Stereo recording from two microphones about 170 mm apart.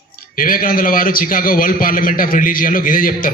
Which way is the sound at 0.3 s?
55° left (ahead or behind).